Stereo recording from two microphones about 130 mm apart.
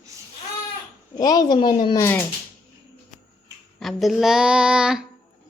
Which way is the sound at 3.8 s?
Centre (ahead or behind).